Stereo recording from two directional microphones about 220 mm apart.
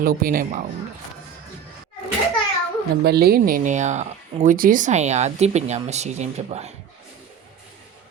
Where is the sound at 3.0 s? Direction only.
45° right (ahead or behind); by 6.7 s 30° right (ahead or behind).